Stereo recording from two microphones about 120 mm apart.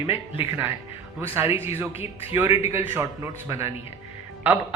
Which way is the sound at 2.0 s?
55° left (ahead or behind).